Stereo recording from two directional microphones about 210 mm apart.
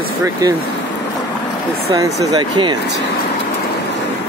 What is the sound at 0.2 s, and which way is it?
Speech, 20° right (ahead or behind).